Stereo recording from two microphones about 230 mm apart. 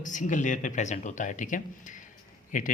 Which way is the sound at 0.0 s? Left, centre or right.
Left.